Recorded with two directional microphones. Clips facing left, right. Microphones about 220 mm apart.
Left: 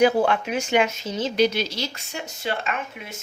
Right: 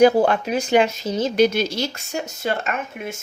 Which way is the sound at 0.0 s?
40° right (ahead or behind).